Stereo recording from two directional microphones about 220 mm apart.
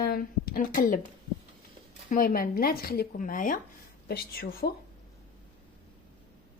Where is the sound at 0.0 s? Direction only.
45° left (ahead or behind).